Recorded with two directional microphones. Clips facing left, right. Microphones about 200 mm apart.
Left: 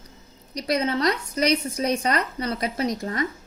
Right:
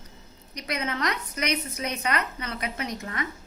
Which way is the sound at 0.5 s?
35° left (ahead or behind).